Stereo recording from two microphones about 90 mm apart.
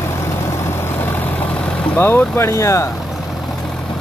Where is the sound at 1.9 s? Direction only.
25° left (ahead or behind).